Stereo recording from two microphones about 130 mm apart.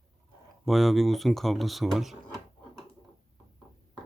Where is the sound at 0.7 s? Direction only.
Centre (ahead or behind).